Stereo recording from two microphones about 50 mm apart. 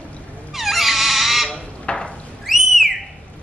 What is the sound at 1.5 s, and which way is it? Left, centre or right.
Fire alarm, centre.